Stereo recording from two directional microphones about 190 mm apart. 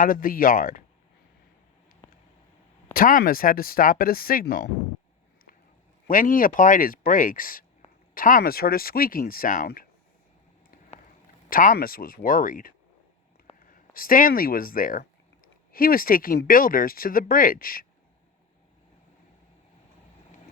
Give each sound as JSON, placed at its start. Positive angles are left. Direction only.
{"t": 0.0, "sound": "speech", "side_deg": 45}
{"t": 2.9, "sound": "speech", "side_deg": 45}
{"t": 6.1, "sound": "speech", "side_deg": 45}
{"t": 11.4, "sound": "speech", "side_deg": 45}